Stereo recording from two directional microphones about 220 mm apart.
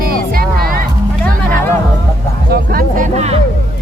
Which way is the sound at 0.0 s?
40° right (ahead or behind).